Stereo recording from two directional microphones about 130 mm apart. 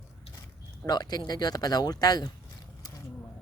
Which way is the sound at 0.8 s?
30° left (ahead or behind).